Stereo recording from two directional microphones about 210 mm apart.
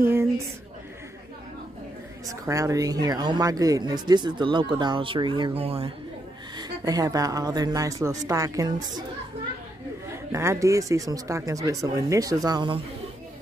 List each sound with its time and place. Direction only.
0.0 s a sound: 10° right (ahead or behind)
2.2 s speech: 15° right (ahead or behind)
10.3 s speech: 15° right (ahead or behind)